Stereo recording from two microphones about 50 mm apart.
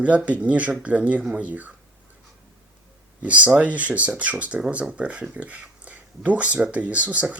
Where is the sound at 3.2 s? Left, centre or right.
Right.